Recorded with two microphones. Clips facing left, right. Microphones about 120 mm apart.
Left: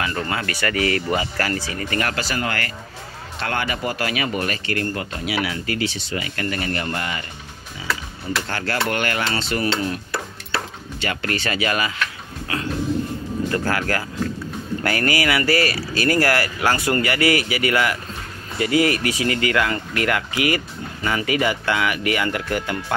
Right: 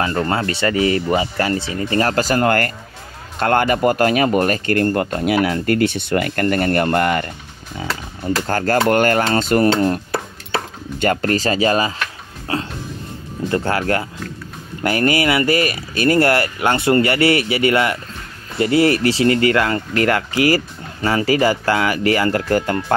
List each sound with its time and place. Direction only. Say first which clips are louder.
0.0 s speech: right 6 dB; 35° right (ahead or behind); by 7.2 s 55° right (ahead or behind)
8.5 s speech: right 10 dB; 45° right (ahead or behind)